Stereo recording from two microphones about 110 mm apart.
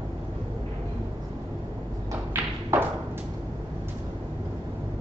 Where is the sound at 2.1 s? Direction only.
25° right (ahead or behind).